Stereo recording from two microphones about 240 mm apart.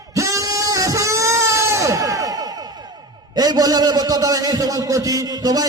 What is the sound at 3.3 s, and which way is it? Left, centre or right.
A man's voice, centre.